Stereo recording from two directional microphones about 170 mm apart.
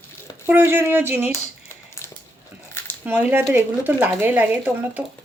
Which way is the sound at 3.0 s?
10° right (ahead or behind).